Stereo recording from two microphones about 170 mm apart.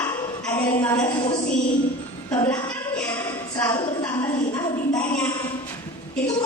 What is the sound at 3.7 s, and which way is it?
Speech, 25° left (ahead or behind).